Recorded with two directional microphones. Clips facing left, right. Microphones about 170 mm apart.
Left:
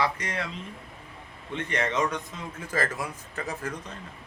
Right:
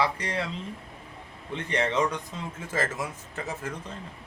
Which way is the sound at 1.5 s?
30° right (ahead or behind).